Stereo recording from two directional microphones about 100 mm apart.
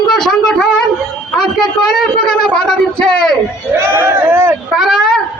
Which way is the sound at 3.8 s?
25° right (ahead or behind).